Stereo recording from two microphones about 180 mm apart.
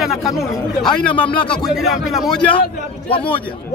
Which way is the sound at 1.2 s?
30° left (ahead or behind).